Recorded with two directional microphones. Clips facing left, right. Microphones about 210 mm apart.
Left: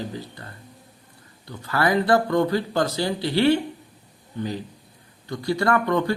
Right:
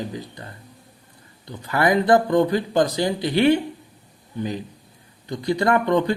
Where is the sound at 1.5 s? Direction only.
15° right (ahead or behind).